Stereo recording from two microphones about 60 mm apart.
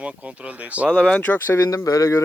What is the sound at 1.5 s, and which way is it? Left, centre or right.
Speech, left.